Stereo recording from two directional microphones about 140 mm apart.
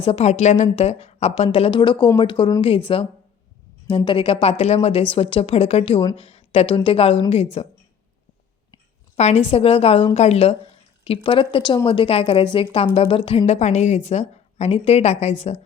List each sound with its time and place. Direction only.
0.0 s a woman's voice: 45° left (ahead or behind)
9.1 s a woman's voice: 50° left (ahead or behind)